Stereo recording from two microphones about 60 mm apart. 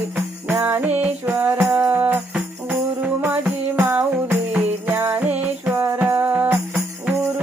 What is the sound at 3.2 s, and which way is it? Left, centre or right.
Music, right.